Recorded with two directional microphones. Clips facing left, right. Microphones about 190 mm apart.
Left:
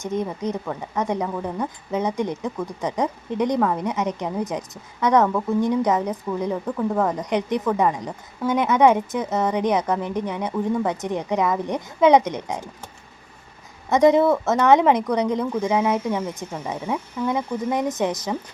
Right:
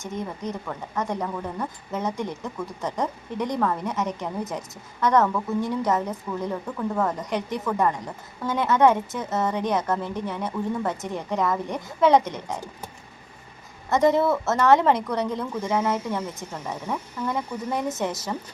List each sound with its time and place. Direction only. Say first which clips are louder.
0.0 s a woman's voice: left 6 dB; 20° left (ahead or behind)
13.9 s a woman's voice: left 4 dB; 15° left (ahead or behind)